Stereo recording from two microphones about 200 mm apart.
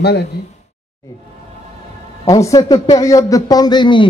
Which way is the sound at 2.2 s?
15° left (ahead or behind).